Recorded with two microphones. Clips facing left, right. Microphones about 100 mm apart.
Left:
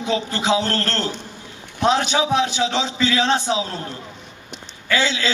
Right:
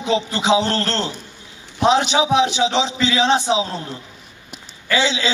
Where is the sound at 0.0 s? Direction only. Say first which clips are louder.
Right 2 dB; 15° right (ahead or behind).